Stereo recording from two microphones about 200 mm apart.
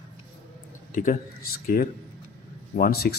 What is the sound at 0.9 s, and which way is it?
Speech, 40° left (ahead or behind).